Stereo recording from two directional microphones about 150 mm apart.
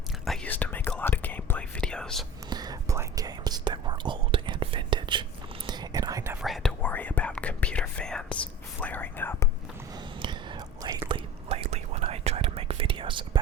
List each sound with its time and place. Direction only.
0.3 s whispering: 10° left (ahead or behind)
2.5 s whispering: 25° right (ahead or behind)
6.4 s whispering: centre (ahead or behind)
11.1 s whispering: 40° right (ahead or behind)